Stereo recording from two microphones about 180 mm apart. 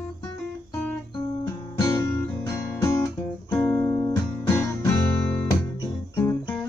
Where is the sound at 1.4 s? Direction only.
15° left (ahead or behind).